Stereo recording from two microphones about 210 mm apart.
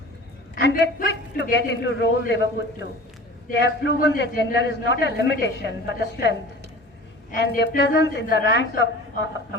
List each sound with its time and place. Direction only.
0.5 s a man's voice: 50° left (ahead or behind)
3.6 s a man's voice: 55° left (ahead or behind)